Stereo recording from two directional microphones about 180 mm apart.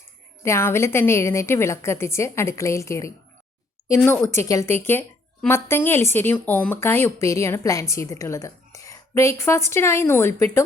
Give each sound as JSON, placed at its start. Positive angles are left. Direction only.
{"t": 0.4, "sound": "a woman's voice", "side_deg": 15}